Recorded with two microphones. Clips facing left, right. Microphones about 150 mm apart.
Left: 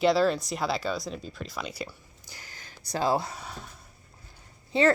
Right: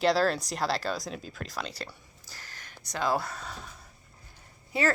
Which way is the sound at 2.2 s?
20° left (ahead or behind).